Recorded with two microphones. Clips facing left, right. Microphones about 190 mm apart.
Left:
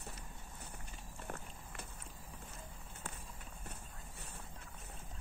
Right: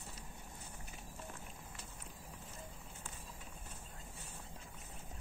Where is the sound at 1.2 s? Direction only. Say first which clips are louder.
Left 6 dB; 60° left (ahead or behind).